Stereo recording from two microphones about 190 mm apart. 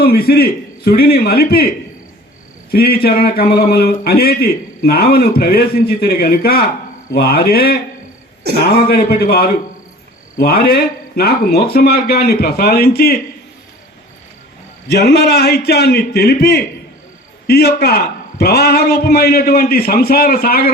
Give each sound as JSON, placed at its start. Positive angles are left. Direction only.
{"t": 0.0, "sound": "a man's voice", "side_deg": 55}
{"t": 2.7, "sound": "a man's voice", "side_deg": 55}
{"t": 14.8, "sound": "a man's voice", "side_deg": 60}